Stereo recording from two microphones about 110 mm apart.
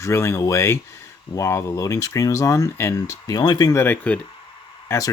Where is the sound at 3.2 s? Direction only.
35° left (ahead or behind).